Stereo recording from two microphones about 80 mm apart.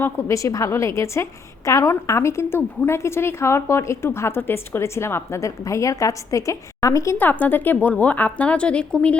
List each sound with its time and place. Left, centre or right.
0.0 s a woman's voice: left
7.2 s a woman's voice: left